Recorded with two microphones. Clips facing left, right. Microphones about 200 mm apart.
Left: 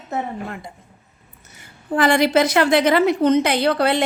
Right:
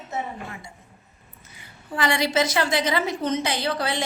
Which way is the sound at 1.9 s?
50° left (ahead or behind).